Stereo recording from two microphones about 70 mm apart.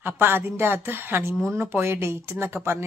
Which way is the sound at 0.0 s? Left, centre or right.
Right.